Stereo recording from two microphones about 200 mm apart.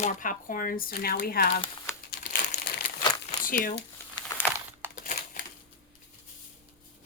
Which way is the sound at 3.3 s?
40° left (ahead or behind).